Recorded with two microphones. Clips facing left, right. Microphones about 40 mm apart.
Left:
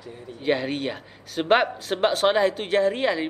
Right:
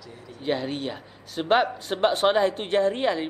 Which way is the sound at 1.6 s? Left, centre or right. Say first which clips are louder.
Even; centre.